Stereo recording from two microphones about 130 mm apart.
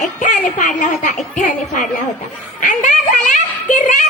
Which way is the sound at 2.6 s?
75° left (ahead or behind).